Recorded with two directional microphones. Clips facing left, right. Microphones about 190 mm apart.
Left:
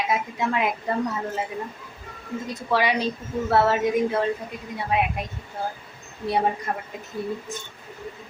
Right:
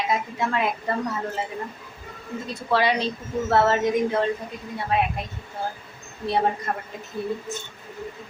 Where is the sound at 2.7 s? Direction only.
10° left (ahead or behind).